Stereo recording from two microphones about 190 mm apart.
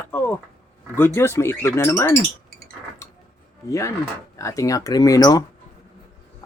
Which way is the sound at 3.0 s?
15° left (ahead or behind).